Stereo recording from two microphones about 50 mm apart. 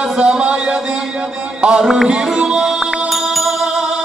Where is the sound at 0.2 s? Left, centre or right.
Centre.